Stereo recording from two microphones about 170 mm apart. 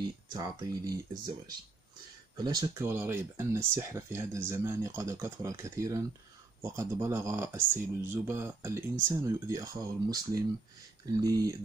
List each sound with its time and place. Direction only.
0.3 s speech: 25° right (ahead or behind)
2.3 s speech: 25° right (ahead or behind)